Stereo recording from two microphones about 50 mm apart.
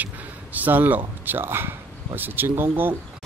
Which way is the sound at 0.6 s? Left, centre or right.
Right.